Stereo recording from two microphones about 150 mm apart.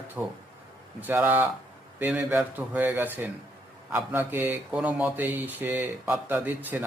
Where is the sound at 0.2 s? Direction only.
10° right (ahead or behind).